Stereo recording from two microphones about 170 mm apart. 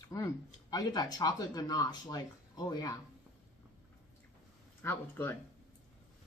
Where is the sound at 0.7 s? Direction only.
25° left (ahead or behind).